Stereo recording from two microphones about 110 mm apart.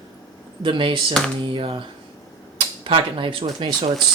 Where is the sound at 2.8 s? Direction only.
50° right (ahead or behind).